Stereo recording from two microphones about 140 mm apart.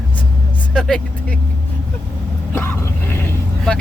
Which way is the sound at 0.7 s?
5° left (ahead or behind).